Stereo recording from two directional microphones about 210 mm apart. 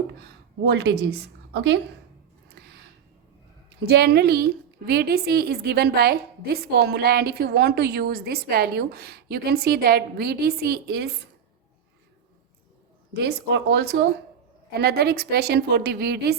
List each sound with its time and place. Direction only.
0.6 s a woman's voice: 50° right (ahead or behind)
2.5 s a sound: 50° right (ahead or behind)
3.8 s a woman's voice: 50° right (ahead or behind)
13.1 s a woman's voice: 50° right (ahead or behind)